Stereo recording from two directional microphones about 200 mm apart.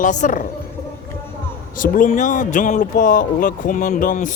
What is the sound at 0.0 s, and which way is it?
Speech, 40° left (ahead or behind).